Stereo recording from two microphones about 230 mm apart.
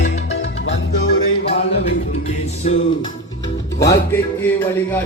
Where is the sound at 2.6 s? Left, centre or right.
Left.